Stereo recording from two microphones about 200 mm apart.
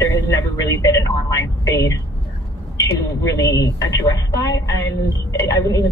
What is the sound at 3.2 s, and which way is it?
A woman's voice, 15° left (ahead or behind).